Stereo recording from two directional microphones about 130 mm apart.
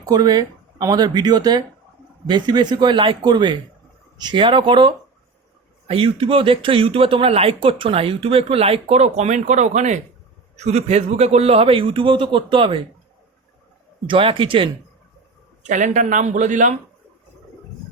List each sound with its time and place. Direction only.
0.0 s a man's voice: 30° right (ahead or behind)
14.1 s a man's voice: 45° right (ahead or behind)
15.6 s speech: 70° right (ahead or behind)